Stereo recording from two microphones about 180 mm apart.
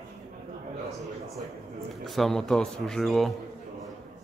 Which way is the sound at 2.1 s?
Centre (ahead or behind).